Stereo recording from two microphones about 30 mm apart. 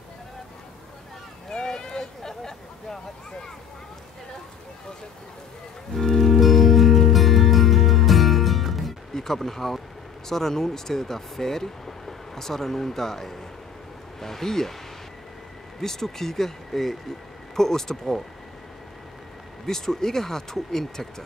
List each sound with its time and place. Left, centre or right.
1.5 s a sound: left
5.9 s music: centre
6.4 s music: centre
9.1 s speech: centre
15.8 s speech: centre
19.6 s speech: centre